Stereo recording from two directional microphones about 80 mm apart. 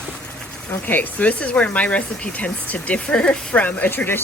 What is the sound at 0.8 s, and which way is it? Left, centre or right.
Speech, left.